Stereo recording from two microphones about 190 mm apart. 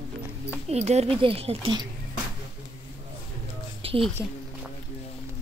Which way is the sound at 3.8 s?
30° right (ahead or behind).